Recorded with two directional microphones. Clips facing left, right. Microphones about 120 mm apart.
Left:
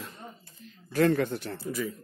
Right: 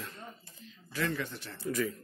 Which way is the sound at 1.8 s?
10° left (ahead or behind).